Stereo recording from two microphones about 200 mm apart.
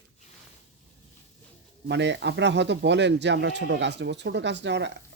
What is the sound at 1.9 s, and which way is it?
Speech, 60° right (ahead or behind).